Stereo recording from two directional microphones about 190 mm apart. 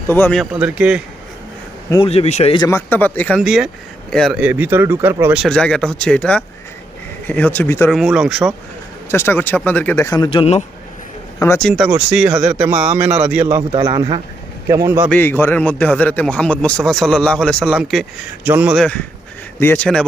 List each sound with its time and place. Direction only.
0.1 s a man's voice: 10° left (ahead or behind)
0.5 s a man's voice: 5° right (ahead or behind)
2.0 s speech: 35° left (ahead or behind)
2.6 s a man's voice: 15° left (ahead or behind)
3.4 s a man's voice: 5° right (ahead or behind); by 7.9 s 10° left (ahead or behind)
7.9 s a man's voice: centre (ahead or behind)
9.0 s a man's voice: 10° left (ahead or behind)
10.2 s speech: 30° left (ahead or behind)
11.3 s speech: 15° left (ahead or behind)
11.6 s a man's voice: 5° right (ahead or behind)
13.6 s speech: 25° right (ahead or behind)
14.7 s speech: 15° right (ahead or behind)
15.1 s a man's voice: 10° left (ahead or behind); by 18.9 s 5° right (ahead or behind)
19.5 s a man's voice: 10° left (ahead or behind)